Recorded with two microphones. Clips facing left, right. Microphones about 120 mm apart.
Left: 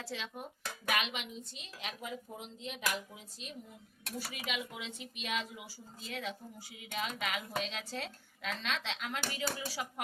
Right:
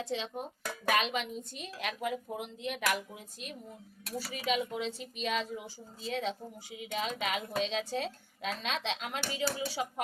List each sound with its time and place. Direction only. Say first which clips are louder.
0.0 s speech: right 6 dB; 25° right (ahead or behind); by 3.0 s 70° right (ahead or behind)
4.3 s a woman's voice: right 10 dB; 35° right (ahead or behind)